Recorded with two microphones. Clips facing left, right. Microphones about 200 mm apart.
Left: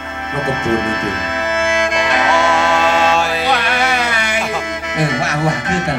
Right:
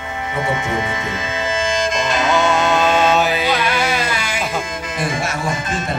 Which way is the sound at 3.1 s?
Centre (ahead or behind).